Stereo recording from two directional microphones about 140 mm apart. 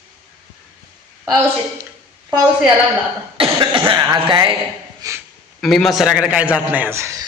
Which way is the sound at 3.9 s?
30° right (ahead or behind).